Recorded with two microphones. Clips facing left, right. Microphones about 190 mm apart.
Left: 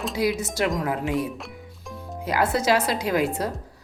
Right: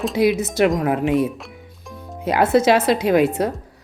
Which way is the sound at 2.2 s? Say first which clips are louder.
Right 7 dB; 25° right (ahead or behind).